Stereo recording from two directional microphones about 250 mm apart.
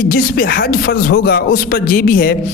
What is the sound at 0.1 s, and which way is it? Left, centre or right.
A man's voice, left.